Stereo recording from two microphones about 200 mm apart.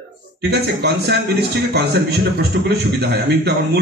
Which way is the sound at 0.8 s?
55° right (ahead or behind).